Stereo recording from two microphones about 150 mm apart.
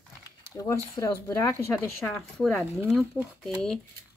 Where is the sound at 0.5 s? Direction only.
20° left (ahead or behind).